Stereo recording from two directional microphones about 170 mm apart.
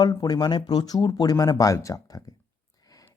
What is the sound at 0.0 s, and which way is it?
A man's voice, 25° left (ahead or behind).